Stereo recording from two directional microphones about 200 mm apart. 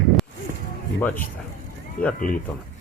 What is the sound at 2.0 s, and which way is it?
Speech, 45° left (ahead or behind).